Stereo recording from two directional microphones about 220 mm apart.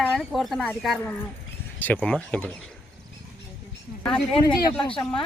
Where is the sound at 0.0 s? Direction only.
Centre (ahead or behind).